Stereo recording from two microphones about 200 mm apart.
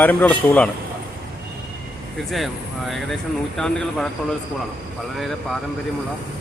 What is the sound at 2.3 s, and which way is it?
Speech, centre (ahead or behind).